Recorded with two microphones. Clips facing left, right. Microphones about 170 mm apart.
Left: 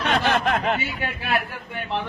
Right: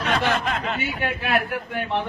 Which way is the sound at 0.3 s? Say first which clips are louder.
Left 3 dB; 55° left (ahead or behind).